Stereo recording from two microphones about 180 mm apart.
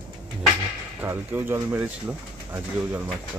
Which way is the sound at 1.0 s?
15° right (ahead or behind).